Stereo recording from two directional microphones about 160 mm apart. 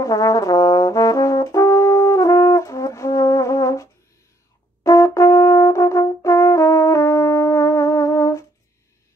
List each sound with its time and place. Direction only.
0.0 s brass instrument: 20° left (ahead or behind)